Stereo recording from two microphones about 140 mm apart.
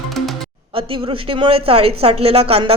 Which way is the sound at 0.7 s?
40° right (ahead or behind).